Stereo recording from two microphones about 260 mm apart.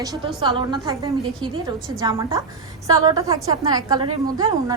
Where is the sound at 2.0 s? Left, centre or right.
Centre.